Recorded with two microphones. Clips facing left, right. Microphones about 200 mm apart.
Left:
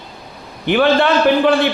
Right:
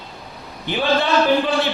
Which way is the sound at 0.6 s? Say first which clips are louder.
Left 6 dB; 65° left (ahead or behind).